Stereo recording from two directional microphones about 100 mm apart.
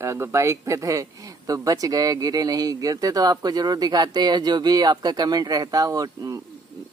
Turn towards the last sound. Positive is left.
turn(degrees=-35)  # may be behind; listen again after turning